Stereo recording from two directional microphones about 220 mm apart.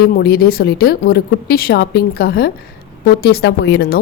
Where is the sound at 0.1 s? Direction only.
45° left (ahead or behind).